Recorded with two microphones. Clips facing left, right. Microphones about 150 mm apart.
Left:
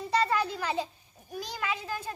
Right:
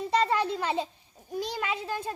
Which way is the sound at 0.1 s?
25° right (ahead or behind).